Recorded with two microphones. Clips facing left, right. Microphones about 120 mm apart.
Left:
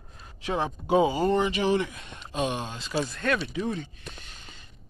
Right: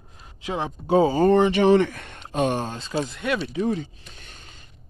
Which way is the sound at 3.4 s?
35° right (ahead or behind).